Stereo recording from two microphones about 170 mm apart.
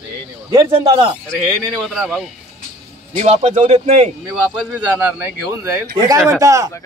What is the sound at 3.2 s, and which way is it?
Speech, 40° right (ahead or behind).